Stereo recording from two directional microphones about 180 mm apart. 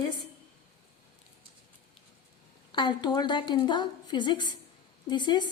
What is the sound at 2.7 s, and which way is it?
A woman's voice, 25° left (ahead or behind).